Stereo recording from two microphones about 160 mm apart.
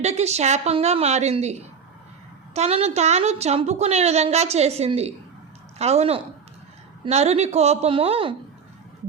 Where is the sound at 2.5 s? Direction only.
40° right (ahead or behind).